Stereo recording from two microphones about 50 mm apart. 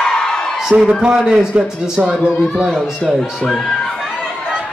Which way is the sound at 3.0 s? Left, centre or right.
Centre.